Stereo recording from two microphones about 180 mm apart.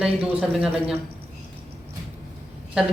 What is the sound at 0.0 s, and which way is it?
Speech, 5° right (ahead or behind).